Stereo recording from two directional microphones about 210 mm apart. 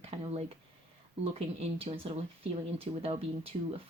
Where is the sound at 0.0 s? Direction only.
30° right (ahead or behind).